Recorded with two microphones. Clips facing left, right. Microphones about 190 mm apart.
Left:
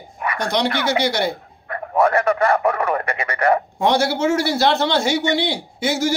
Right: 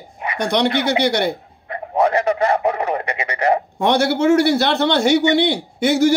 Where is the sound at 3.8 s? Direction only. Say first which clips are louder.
Right 2 dB; 60° right (ahead or behind).